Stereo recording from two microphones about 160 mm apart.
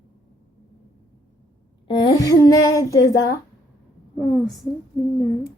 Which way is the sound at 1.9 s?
25° left (ahead or behind).